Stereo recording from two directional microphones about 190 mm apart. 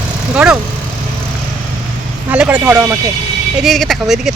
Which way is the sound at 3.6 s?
Centre (ahead or behind).